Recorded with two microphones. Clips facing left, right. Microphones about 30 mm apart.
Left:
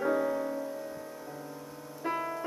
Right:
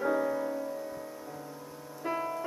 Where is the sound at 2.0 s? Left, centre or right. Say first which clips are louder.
Even; centre.